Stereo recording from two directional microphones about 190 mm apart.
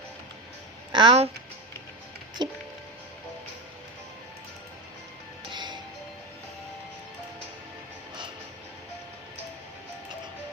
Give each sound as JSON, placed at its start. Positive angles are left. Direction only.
{"t": 0.9, "sound": "speech", "side_deg": -30}
{"t": 2.4, "sound": "speech", "side_deg": -25}
{"t": 5.5, "sound": "music", "side_deg": -25}